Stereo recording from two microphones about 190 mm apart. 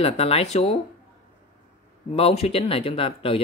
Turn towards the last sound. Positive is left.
turn(degrees=30)  # may be behind; listen again after turning